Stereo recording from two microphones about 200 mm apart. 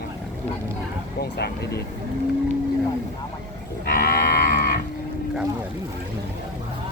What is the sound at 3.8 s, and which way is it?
Livestock, 50° left (ahead or behind).